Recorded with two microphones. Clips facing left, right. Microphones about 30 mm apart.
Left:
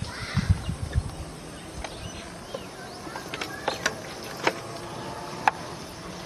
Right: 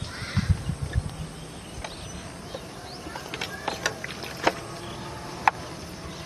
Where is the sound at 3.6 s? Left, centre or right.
Centre.